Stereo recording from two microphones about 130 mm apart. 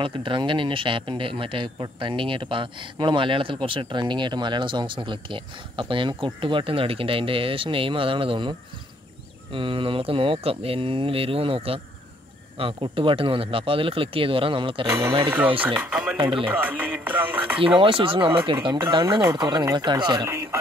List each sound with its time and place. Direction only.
0.0 s speech: 40° right (ahead or behind)
15.2 s speech: 15° right (ahead or behind)
17.7 s speech: 40° right (ahead or behind)